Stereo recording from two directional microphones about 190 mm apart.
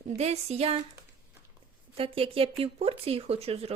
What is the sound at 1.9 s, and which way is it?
Speech, 30° right (ahead or behind).